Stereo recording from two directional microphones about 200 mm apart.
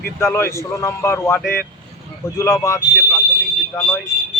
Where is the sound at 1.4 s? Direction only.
50° left (ahead or behind).